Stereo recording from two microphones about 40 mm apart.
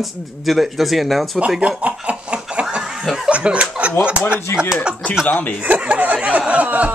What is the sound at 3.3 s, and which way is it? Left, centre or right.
Speech, right.